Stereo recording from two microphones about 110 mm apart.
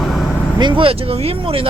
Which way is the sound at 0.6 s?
50° right (ahead or behind).